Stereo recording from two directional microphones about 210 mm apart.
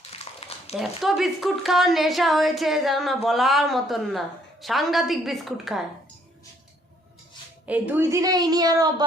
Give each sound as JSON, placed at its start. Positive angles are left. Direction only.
{"t": 0.1, "sound": "a sound", "side_deg": 30}
{"t": 0.8, "sound": "a woman's voice", "side_deg": 0}
{"t": 7.7, "sound": "a woman's voice", "side_deg": -10}